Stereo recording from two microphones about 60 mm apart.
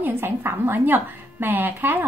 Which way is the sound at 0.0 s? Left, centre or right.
Right.